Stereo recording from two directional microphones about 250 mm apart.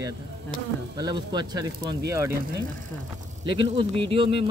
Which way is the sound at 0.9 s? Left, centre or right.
Centre.